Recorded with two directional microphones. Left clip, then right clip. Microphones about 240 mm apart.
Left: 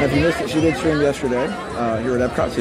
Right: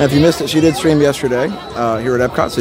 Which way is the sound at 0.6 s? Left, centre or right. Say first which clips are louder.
Right 6 dB; right.